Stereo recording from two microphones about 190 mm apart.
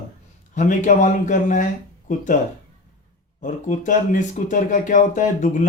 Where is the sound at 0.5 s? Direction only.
40° left (ahead or behind).